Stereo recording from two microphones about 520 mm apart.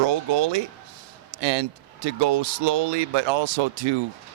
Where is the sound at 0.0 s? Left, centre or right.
Right.